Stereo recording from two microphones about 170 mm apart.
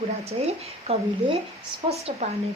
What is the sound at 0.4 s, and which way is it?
A woman's voice, 40° right (ahead or behind).